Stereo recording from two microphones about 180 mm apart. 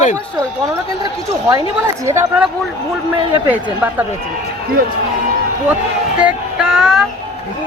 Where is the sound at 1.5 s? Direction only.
20° right (ahead or behind).